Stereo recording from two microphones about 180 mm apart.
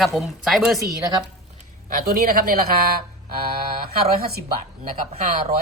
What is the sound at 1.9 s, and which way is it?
Speech, 55° right (ahead or behind).